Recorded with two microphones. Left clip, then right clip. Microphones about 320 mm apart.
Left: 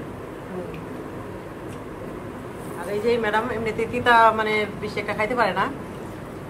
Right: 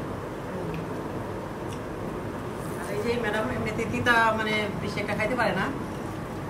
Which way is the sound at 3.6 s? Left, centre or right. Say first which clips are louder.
Left 4 dB; centre.